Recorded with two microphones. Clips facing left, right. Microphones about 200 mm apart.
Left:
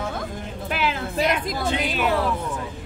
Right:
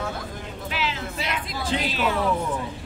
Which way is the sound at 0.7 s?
55° left (ahead or behind).